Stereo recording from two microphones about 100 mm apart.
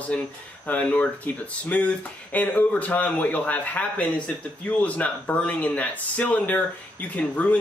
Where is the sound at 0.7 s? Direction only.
15° left (ahead or behind).